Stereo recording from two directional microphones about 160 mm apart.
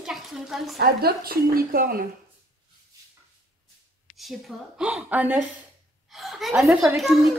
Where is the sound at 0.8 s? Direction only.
70° right (ahead or behind).